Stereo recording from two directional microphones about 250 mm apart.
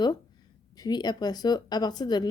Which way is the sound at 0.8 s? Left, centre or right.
Centre.